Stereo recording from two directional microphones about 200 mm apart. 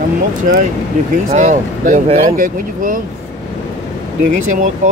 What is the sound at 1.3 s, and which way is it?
Speech, 40° right (ahead or behind).